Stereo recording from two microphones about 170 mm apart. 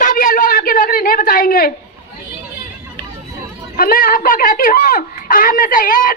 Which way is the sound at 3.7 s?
55° left (ahead or behind).